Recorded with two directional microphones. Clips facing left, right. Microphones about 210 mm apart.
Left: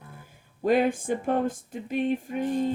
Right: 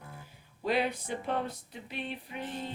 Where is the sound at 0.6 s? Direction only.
50° left (ahead or behind).